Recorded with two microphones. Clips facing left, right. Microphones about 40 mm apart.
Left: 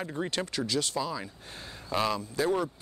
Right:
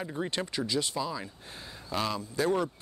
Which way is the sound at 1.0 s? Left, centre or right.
Centre.